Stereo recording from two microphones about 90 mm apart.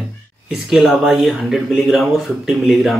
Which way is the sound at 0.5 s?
5° right (ahead or behind).